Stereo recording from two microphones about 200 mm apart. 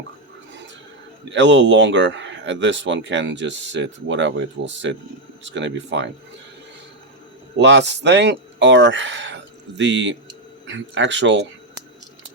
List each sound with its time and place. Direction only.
1.3 s speech: 65° right (ahead or behind)
7.6 s speech: 60° right (ahead or behind)